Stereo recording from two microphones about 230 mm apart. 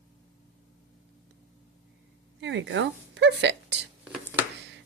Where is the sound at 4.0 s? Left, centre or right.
Centre.